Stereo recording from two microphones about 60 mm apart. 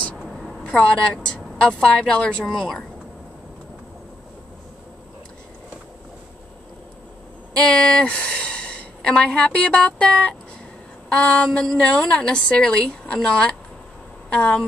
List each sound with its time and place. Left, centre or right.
0.2 s a sound: centre
0.7 s a woman's voice: centre
2.4 s a woman's voice: centre
7.5 s a woman's voice: centre
11.1 s a sound: centre
11.4 s a woman's voice: centre